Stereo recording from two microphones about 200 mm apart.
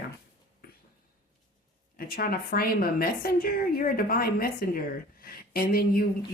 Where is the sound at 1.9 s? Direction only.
45° left (ahead or behind).